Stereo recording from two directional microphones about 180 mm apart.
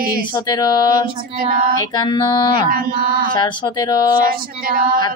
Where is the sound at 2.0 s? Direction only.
25° left (ahead or behind).